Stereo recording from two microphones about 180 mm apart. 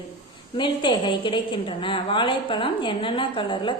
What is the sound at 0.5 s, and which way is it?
A woman's voice, 25° left (ahead or behind).